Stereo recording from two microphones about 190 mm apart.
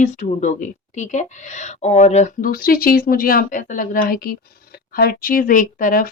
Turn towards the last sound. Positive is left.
turn(degrees=45)  # may be behind; listen again after turning